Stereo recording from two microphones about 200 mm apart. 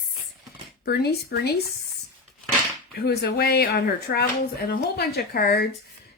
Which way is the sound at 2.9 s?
50° left (ahead or behind).